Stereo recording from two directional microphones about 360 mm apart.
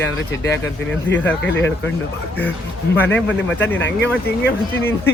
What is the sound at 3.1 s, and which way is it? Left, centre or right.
Speech, centre.